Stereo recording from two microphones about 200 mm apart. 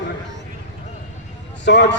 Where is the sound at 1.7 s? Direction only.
60° left (ahead or behind).